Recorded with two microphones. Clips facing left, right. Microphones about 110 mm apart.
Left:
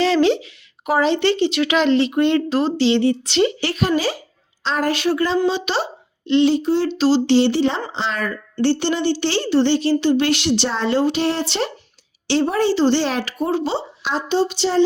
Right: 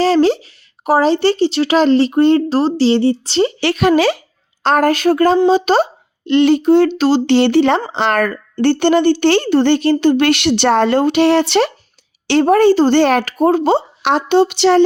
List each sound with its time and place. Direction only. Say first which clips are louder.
0.0 s a woman's voice: right 4 dB; 40° right (ahead or behind)
3.6 s speech: right 7 dB; 75° right (ahead or behind)
4.6 s speech: right 7 dB; 55° right (ahead or behind)
12.3 s speech: right 7 dB; 60° right (ahead or behind)